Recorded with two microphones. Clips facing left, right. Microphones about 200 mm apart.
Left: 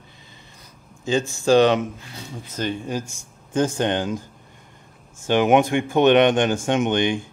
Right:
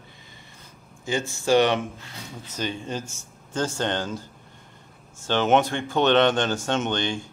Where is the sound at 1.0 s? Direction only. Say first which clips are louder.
Left 5 dB; 15° left (ahead or behind).